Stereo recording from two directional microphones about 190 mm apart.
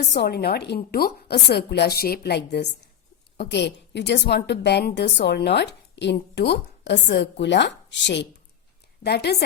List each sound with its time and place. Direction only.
0.1 s a woman's voice: 60° left (ahead or behind)